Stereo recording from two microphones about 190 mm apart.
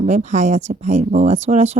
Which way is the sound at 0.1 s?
35° right (ahead or behind).